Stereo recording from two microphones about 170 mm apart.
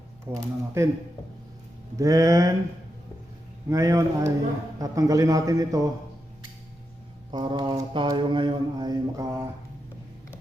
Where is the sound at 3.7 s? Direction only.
20° right (ahead or behind).